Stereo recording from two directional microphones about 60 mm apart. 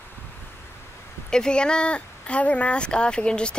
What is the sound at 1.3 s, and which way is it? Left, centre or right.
Speech, centre.